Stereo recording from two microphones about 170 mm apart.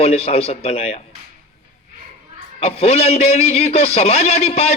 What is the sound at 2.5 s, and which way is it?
A man's voice, 35° left (ahead or behind).